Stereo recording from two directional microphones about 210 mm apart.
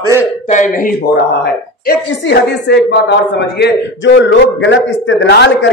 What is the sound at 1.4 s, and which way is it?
A woman's voice, 50° left (ahead or behind).